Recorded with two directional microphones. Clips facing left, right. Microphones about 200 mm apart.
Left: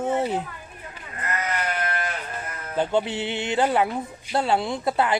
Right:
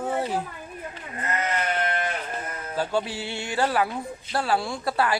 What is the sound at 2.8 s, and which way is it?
A woman's voice, 20° left (ahead or behind).